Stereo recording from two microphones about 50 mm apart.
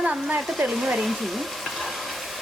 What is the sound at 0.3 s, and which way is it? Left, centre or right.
Hair dryer, centre.